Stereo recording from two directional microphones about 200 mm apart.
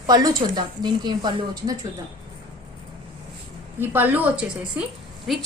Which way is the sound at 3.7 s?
10° right (ahead or behind).